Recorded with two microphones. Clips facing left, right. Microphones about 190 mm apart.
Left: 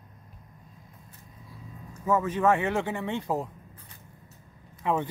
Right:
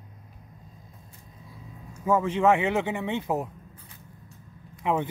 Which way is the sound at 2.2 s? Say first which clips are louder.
Right 3 dB; 25° right (ahead or behind).